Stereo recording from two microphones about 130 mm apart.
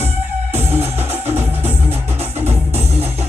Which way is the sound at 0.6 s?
50° right (ahead or behind).